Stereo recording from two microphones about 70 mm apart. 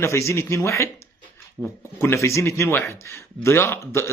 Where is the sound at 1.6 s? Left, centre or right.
Centre.